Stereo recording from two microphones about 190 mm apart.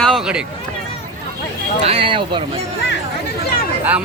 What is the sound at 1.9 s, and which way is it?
Speech, 30° right (ahead or behind).